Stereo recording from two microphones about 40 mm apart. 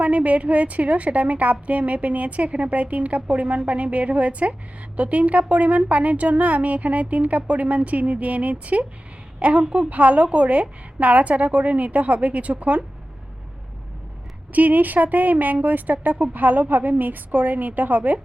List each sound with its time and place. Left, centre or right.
0.0 s a woman's voice: right
9.9 s a woman's voice: right
14.5 s a woman's voice: right